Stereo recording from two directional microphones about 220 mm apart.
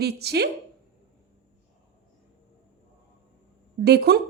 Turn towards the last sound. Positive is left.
turn(degrees=-45)  # may be behind; listen again after turning